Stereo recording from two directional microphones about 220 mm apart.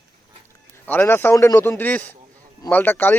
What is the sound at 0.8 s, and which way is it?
Speech, 10° left (ahead or behind).